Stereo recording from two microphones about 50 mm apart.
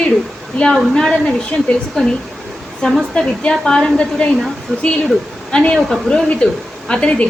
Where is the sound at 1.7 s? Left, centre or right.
Left.